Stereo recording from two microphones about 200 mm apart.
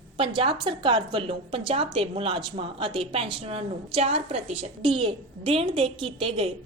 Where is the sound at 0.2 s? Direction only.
25° right (ahead or behind).